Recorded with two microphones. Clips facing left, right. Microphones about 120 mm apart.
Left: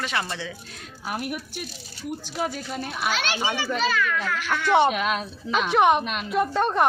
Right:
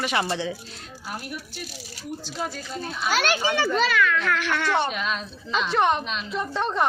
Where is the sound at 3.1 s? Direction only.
40° right (ahead or behind).